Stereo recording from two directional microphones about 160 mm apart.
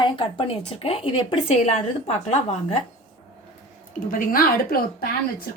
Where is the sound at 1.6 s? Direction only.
45° left (ahead or behind).